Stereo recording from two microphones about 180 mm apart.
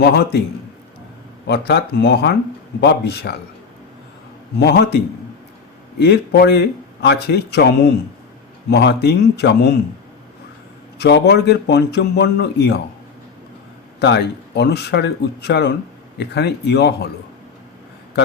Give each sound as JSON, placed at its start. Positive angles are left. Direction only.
{"t": 0.0, "sound": "speech", "side_deg": 65}
{"t": 1.5, "sound": "speech", "side_deg": 65}
{"t": 4.6, "sound": "speech", "side_deg": 65}
{"t": 8.7, "sound": "speech", "side_deg": 70}
{"t": 11.0, "sound": "speech", "side_deg": 70}
{"t": 14.0, "sound": "speech", "side_deg": 70}